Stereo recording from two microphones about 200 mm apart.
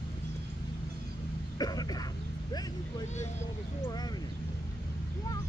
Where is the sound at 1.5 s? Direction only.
20° left (ahead or behind).